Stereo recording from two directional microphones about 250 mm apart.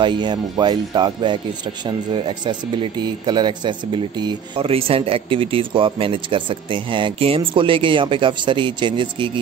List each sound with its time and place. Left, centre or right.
0.0 s speech: centre